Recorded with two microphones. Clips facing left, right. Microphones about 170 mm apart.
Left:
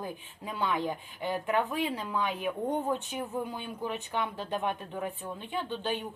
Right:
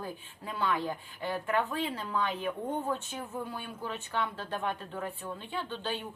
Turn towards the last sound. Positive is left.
turn(degrees=15)  # may be behind; listen again after turning